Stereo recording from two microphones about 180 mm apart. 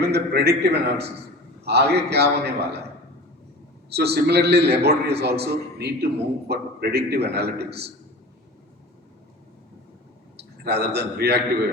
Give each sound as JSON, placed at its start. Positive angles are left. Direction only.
{"t": 0.0, "sound": "a man's voice", "side_deg": -65}
{"t": 3.8, "sound": "a man's voice", "side_deg": -65}
{"t": 10.3, "sound": "a man's voice", "side_deg": -65}